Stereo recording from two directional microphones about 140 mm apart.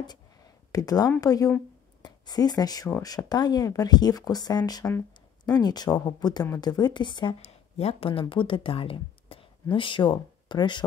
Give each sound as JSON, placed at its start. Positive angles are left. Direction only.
{"t": 0.7, "sound": "a woman's voice", "side_deg": 25}
{"t": 7.4, "sound": "speech", "side_deg": 45}